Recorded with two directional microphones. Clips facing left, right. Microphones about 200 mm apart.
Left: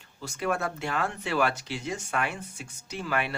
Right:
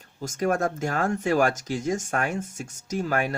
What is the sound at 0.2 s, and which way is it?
Speech, 45° right (ahead or behind).